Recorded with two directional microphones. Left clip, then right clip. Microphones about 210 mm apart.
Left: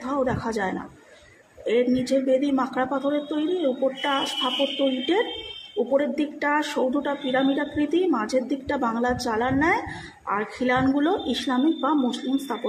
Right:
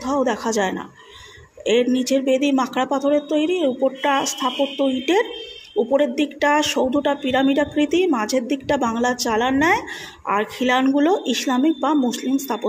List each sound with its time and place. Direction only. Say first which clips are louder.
0.0 s speech: right 5 dB; 35° right (ahead or behind)
5.9 s speech: right 5 dB; 35° right (ahead or behind)